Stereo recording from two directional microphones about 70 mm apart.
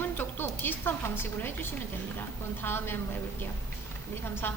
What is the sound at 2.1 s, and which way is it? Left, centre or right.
A woman's voice, left.